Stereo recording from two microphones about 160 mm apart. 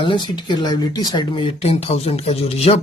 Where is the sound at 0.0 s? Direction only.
30° left (ahead or behind).